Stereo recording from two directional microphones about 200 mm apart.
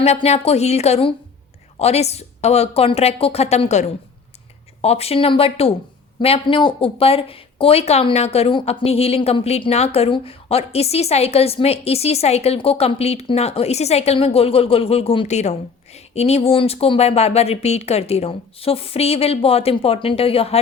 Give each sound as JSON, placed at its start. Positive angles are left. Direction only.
{"t": 0.0, "sound": "speech", "side_deg": 30}